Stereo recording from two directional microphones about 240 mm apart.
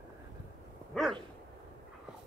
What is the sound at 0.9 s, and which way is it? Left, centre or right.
Dog, centre.